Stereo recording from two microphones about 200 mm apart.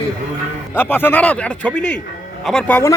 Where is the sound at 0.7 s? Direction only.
10° left (ahead or behind).